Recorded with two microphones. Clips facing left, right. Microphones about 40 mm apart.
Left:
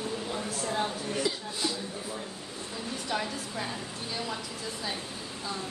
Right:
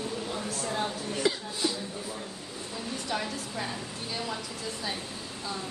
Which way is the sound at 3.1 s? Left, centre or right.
Centre.